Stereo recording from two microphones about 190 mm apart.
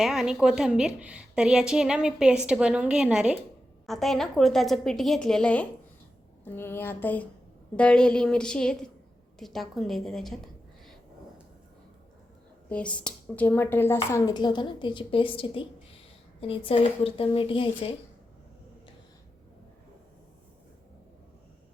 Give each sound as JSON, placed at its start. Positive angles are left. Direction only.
{"t": 0.0, "sound": "a woman's voice", "side_deg": 0}
{"t": 12.6, "sound": "speech", "side_deg": 5}